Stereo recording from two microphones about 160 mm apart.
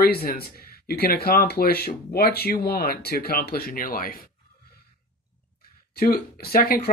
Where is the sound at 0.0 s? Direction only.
70° left (ahead or behind).